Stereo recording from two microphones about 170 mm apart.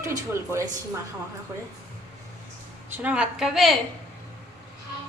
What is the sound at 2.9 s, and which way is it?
Speech, 5° right (ahead or behind).